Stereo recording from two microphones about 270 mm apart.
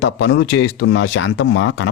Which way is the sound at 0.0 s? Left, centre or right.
Left.